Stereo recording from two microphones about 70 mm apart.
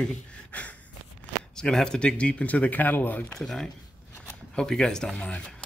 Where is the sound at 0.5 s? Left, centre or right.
Centre.